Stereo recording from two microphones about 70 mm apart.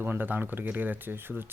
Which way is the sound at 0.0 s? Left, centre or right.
Right.